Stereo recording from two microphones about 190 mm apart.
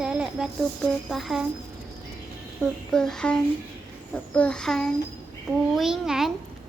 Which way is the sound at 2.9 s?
5° left (ahead or behind).